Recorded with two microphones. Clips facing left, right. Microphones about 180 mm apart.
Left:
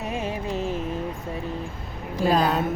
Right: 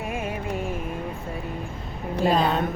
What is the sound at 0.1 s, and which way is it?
Music, 25° left (ahead or behind).